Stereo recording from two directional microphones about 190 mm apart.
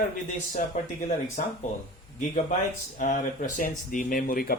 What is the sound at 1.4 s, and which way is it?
A man's voice, 40° left (ahead or behind).